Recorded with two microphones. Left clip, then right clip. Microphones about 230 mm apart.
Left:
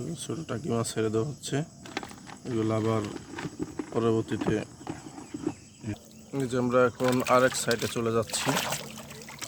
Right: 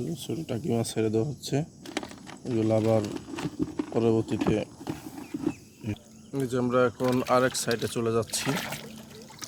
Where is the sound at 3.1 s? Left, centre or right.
Right.